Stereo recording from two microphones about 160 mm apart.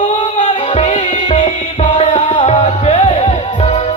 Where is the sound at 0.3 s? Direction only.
40° left (ahead or behind).